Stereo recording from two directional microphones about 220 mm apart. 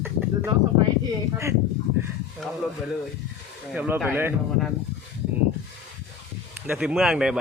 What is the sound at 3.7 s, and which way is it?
Speech, 5° right (ahead or behind).